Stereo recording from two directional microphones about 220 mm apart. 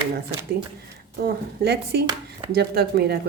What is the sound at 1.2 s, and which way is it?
A woman's voice, 45° right (ahead or behind).